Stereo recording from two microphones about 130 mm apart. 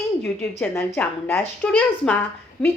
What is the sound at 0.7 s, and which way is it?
A woman's voice, 15° left (ahead or behind).